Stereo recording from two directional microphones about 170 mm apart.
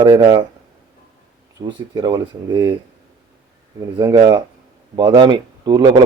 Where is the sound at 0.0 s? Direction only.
25° right (ahead or behind).